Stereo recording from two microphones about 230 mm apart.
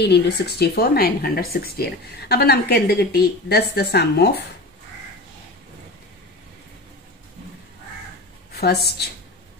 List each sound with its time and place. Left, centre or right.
0.0 s speech: left
8.5 s speech: left